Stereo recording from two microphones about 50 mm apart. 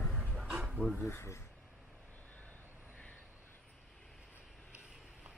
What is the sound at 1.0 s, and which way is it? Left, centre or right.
Speech, left.